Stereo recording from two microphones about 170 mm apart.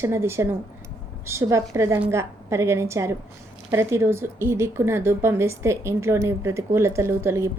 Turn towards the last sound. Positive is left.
turn(degrees=-15)  # may be behind; listen again after turning